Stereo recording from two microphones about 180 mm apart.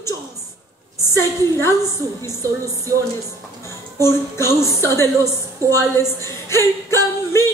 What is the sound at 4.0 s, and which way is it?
Speech, 15° left (ahead or behind).